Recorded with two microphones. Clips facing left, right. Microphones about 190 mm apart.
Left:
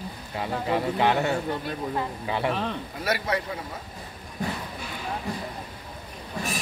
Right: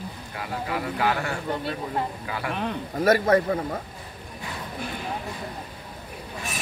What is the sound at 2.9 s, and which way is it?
Speech, 50° right (ahead or behind).